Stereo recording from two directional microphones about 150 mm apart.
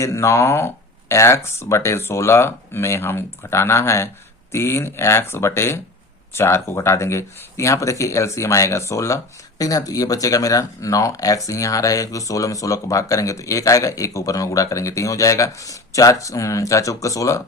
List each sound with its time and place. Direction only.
0.0 s speech: 20° left (ahead or behind)